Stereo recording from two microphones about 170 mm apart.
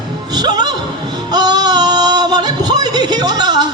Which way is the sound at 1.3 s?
25° right (ahead or behind).